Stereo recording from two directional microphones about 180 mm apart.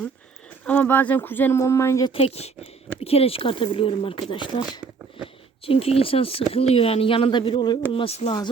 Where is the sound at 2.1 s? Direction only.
35° left (ahead or behind).